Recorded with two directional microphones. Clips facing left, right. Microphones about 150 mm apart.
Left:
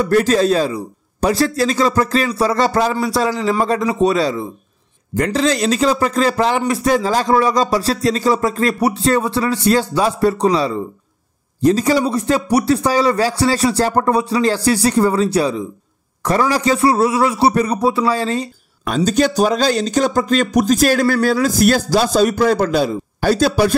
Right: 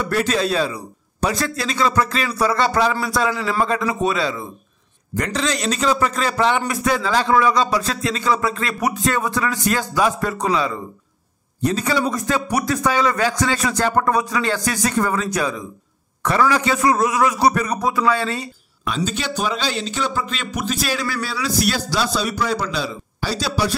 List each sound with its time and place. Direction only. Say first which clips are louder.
0.1 s speech: left 6 dB; 40° left (ahead or behind)
3.3 s a man's voice: left 4 dB; 20° left (ahead or behind)
3.6 s speech: left 5 dB; 35° left (ahead or behind)
18.9 s speech: left 9 dB; 45° left (ahead or behind)